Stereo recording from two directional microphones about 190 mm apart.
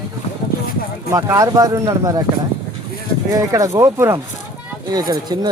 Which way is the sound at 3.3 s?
15° right (ahead or behind).